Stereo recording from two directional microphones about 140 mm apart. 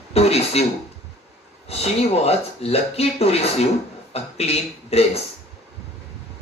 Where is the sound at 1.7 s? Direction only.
45° left (ahead or behind).